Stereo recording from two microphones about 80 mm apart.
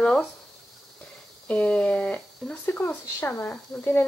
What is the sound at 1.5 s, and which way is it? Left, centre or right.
Speech, centre.